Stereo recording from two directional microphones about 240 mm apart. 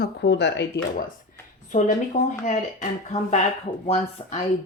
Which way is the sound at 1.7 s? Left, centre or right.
Left.